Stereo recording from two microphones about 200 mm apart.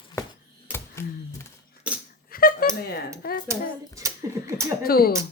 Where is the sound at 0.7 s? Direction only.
15° left (ahead or behind).